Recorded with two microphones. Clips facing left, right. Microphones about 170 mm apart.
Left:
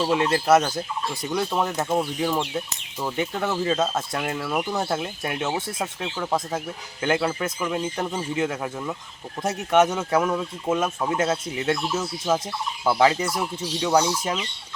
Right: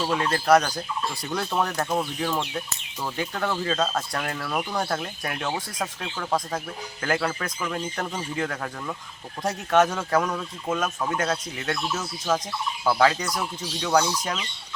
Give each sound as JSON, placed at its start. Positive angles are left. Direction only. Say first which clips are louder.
{"t": 0.0, "sound": "speech", "louder": "left 3 dB", "side_deg": 20}
{"t": 5.2, "sound": "speech", "louder": "left 3 dB", "side_deg": 25}